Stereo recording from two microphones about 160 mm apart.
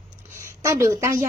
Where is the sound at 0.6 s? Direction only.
20° right (ahead or behind).